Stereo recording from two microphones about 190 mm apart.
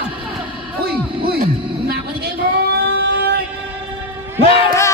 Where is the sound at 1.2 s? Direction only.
55° right (ahead or behind).